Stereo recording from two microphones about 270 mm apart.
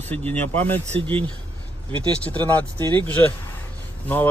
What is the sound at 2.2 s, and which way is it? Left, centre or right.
Speech, centre.